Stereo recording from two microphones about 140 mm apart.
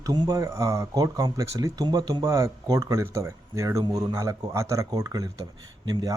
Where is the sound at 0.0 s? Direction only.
30° right (ahead or behind).